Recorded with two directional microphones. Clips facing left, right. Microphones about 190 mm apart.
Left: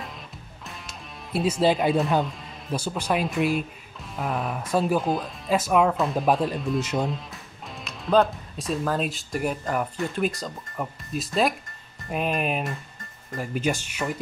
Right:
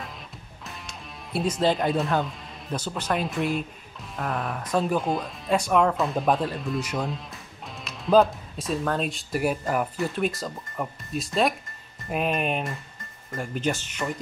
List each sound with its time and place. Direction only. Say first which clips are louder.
0.7 s music: even; centre (ahead or behind)
2.2 s speech: left 1 dB; 5° left (ahead or behind)
6.8 s speech: left 3 dB; 25° left (ahead or behind)
7.1 s speech: left 2 dB; centre (ahead or behind)